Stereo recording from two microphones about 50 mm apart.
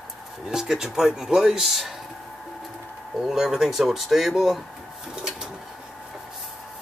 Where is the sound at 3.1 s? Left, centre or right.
Centre.